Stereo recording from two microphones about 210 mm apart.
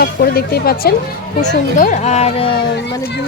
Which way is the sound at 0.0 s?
45° left (ahead or behind).